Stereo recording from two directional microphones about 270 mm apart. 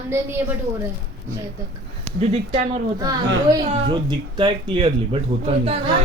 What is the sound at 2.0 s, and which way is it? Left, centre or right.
Speech, right.